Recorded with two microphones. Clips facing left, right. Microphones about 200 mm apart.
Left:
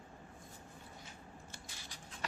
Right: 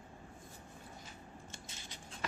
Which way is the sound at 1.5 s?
25° right (ahead or behind).